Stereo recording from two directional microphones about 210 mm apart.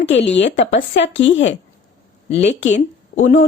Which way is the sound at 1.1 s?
60° left (ahead or behind).